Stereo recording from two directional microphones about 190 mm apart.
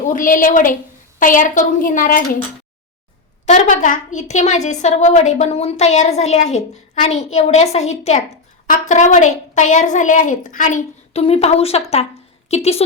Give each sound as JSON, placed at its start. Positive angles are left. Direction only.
{"t": 0.1, "sound": "a woman's voice", "side_deg": 45}
{"t": 3.4, "sound": "a woman's voice", "side_deg": 40}